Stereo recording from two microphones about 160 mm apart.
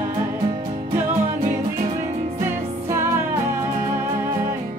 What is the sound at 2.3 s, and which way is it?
Music, 15° right (ahead or behind).